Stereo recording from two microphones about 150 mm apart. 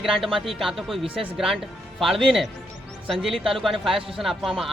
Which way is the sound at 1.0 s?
35° right (ahead or behind).